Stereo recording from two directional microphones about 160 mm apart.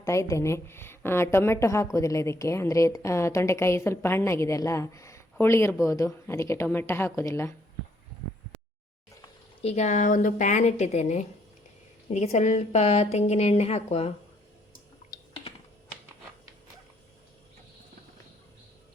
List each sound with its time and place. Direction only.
0.0 s a woman's voice: 20° left (ahead or behind)
9.6 s a woman's voice: 45° left (ahead or behind)